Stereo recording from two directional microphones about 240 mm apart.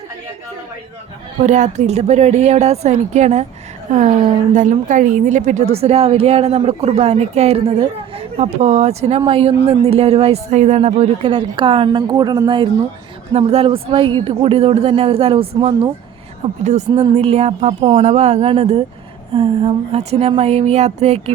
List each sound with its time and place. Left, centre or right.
1.4 s a woman's voice: right